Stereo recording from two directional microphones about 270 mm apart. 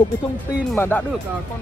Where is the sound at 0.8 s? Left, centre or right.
Centre.